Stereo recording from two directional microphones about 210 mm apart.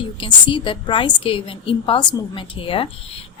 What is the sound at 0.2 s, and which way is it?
A woman's voice, 25° left (ahead or behind).